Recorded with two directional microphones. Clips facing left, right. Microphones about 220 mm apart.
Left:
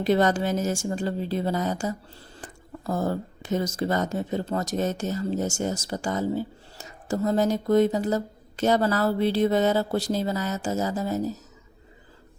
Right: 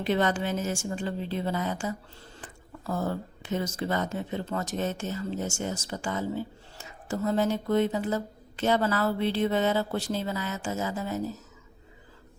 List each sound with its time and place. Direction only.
0.0 s speech: 40° left (ahead or behind)